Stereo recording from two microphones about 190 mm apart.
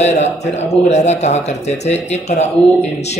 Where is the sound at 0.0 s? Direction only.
35° left (ahead or behind).